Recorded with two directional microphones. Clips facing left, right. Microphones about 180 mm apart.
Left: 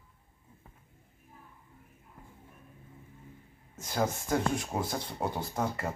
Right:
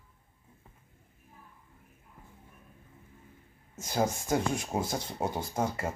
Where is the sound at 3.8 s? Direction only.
20° right (ahead or behind).